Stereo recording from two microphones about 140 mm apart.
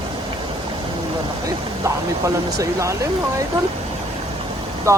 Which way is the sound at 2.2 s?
20° right (ahead or behind).